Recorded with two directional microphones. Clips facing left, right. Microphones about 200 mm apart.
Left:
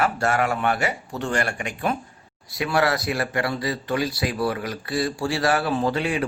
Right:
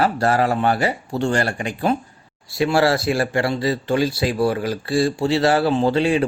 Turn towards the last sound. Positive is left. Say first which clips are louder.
# right 6 dB
turn(degrees=-30)  # may be behind; listen again after turning